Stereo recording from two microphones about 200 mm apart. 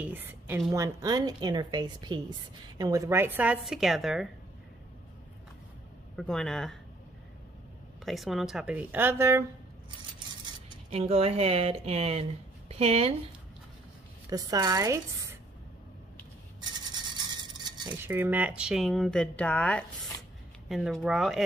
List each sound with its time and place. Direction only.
0.0 s a woman's voice: 10° right (ahead or behind)
6.1 s speech: centre (ahead or behind)
8.0 s speech: centre (ahead or behind)
10.9 s a woman's voice: 30° right (ahead or behind)
14.3 s speech: 20° right (ahead or behind)
17.8 s speech: 10° right (ahead or behind)